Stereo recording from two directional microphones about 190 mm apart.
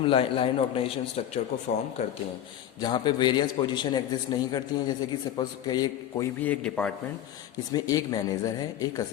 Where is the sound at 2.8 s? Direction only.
25° left (ahead or behind); by 6.9 s 5° left (ahead or behind).